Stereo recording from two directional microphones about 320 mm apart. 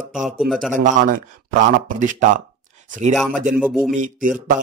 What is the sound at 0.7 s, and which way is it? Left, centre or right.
Speech, right.